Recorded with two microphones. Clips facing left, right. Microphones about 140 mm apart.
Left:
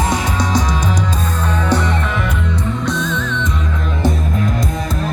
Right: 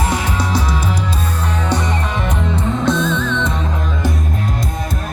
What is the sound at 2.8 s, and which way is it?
Music, 30° right (ahead or behind).